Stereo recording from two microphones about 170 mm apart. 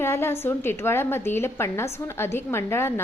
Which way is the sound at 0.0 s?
15° left (ahead or behind).